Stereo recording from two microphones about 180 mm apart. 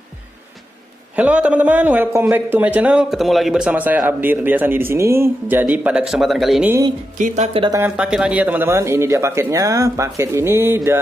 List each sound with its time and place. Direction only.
1.1 s a man's voice: 5° right (ahead or behind)
7.2 s speech: 45° right (ahead or behind)
7.9 s a man's voice: 5° right (ahead or behind)